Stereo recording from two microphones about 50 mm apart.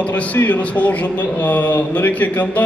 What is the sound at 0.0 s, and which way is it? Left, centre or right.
A man's voice, left.